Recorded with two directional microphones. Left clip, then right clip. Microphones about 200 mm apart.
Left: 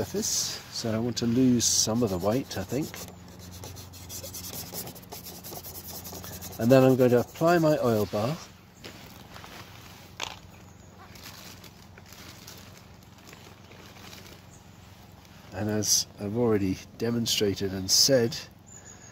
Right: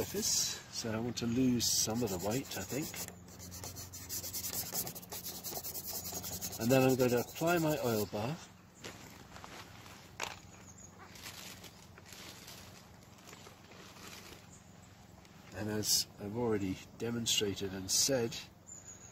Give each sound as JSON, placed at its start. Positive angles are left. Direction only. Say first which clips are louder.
{"t": 0.0, "sound": "speech", "louder": "left 5 dB", "side_deg": 30}
{"t": 6.6, "sound": "speech", "louder": "left 9 dB", "side_deg": 30}
{"t": 10.1, "sound": "a sound", "louder": "left 5 dB", "side_deg": 15}
{"t": 15.5, "sound": "speech", "louder": "left 8 dB", "side_deg": 40}